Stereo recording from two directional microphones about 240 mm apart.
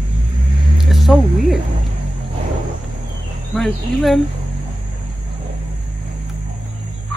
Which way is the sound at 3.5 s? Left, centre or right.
Centre.